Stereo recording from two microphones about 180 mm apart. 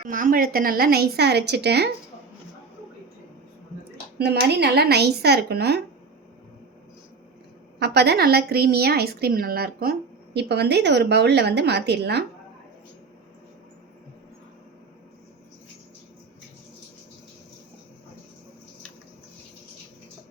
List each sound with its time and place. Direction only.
0.1 s a woman's voice: 50° right (ahead or behind); by 1.9 s 65° right (ahead or behind)
3.9 s a woman's voice: 65° right (ahead or behind)
7.8 s a woman's voice: 65° right (ahead or behind)
10.3 s a woman's voice: 65° right (ahead or behind)